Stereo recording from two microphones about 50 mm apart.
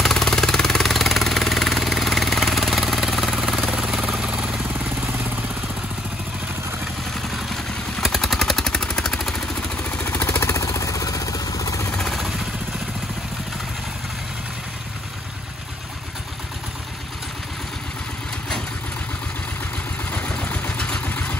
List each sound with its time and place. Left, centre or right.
0.0 s jackhammer: centre
3.7 s vehicle: centre
4.7 s vehicle: right
7.2 s vehicle: centre
10.2 s vehicle: left
10.5 s vehicle: left
12.0 s vehicle: centre
20.1 s a sound: left
21.1 s vehicle: left